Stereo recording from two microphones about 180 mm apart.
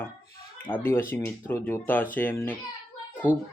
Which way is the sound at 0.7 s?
25° left (ahead or behind).